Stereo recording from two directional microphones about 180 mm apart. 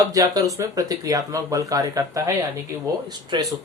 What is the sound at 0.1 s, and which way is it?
Speech, 20° right (ahead or behind).